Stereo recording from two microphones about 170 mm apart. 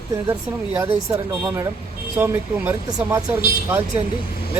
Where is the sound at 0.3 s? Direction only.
15° right (ahead or behind).